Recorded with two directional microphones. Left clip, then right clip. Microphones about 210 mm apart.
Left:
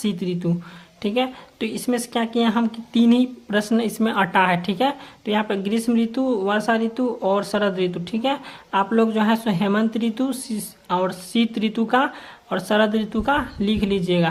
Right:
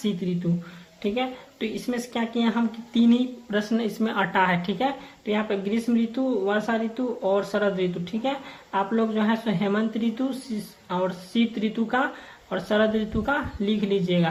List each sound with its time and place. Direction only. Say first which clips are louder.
0.2 s speech: left 4 dB; 40° left (ahead or behind)